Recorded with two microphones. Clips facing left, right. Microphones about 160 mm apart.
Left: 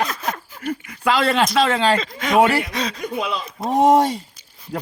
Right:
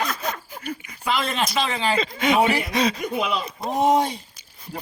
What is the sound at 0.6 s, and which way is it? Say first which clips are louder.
Speech: left 7 dB; 90° left.